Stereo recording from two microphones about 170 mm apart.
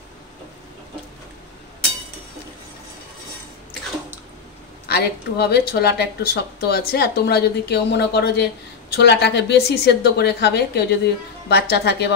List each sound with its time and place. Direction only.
4.8 s speech: 70° left (ahead or behind)